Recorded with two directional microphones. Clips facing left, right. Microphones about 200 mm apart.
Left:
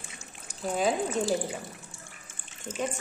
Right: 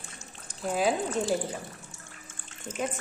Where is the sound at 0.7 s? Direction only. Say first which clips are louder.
Even; centre (ahead or behind).